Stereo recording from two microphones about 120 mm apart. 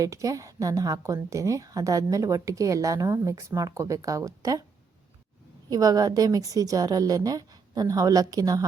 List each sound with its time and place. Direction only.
0.0 s a woman's voice: 30° right (ahead or behind)
5.6 s a woman's voice: 30° right (ahead or behind)